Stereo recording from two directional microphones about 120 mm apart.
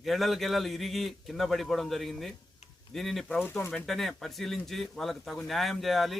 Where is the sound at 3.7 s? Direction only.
5° left (ahead or behind).